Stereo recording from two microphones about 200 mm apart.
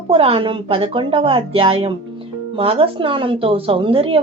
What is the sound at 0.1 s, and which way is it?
Speech, 30° right (ahead or behind).